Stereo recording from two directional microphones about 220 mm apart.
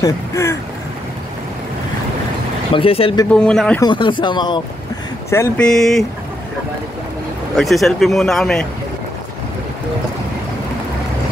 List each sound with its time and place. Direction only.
0.0 s a sound: 15° left (ahead or behind)
2.7 s speech: 25° left (ahead or behind)
3.3 s speech: 5° left (ahead or behind)
3.8 s speech: 20° left (ahead or behind)
5.3 s speech: 10° left (ahead or behind)
7.5 s speech: centre (ahead or behind)